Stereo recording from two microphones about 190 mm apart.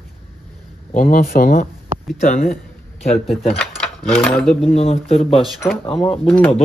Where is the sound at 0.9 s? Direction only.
45° left (ahead or behind).